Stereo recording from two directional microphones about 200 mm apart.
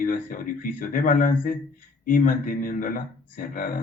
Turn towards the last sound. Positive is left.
turn(degrees=45)  # may be behind; listen again after turning